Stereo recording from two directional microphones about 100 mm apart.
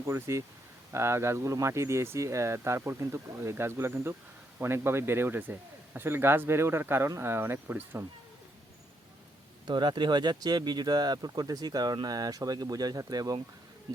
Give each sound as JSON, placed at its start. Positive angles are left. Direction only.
{"t": 0.0, "sound": "speech", "side_deg": -30}
{"t": 9.6, "sound": "speech", "side_deg": -50}